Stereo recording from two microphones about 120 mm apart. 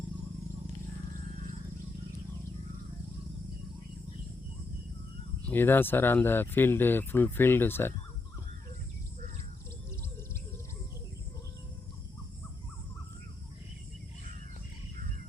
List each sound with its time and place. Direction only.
5.5 s speech: 15° left (ahead or behind)